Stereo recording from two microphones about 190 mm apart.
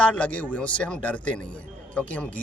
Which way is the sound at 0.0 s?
5° left (ahead or behind).